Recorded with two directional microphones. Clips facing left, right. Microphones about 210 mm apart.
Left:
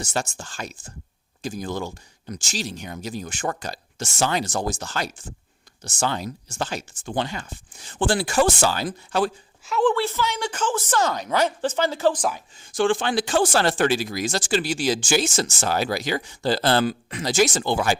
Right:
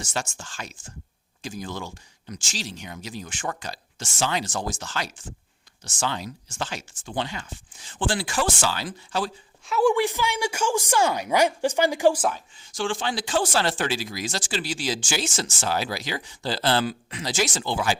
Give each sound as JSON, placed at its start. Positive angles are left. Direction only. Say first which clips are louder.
{"t": 0.0, "sound": "speech", "louder": "left 4 dB", "side_deg": 40}
{"t": 9.6, "sound": "a woman's voice", "louder": "even", "side_deg": -5}
{"t": 9.9, "sound": "a woman's voice", "louder": "right 1 dB", "side_deg": -15}
{"t": 12.7, "sound": "speech", "louder": "left 6 dB", "side_deg": 55}